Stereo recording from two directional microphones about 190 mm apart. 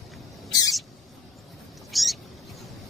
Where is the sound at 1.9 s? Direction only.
Centre (ahead or behind).